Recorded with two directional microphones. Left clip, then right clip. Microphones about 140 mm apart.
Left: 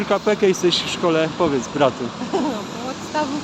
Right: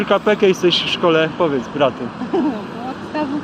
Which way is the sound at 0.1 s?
10° left (ahead or behind).